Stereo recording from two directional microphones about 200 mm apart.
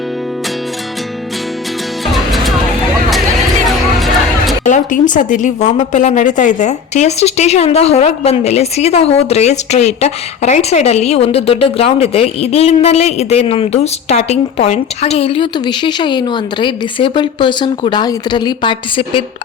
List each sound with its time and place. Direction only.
2.1 s music: centre (ahead or behind)
4.6 s a woman's voice: 40° left (ahead or behind)